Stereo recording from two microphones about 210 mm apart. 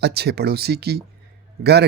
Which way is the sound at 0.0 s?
50° right (ahead or behind).